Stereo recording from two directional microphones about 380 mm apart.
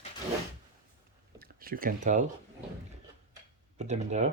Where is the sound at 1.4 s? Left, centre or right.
Right.